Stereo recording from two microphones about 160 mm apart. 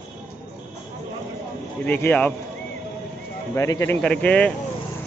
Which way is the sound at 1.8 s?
10° left (ahead or behind).